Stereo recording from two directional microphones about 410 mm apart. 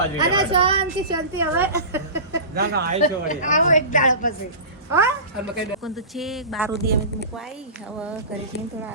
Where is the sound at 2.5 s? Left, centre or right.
Right.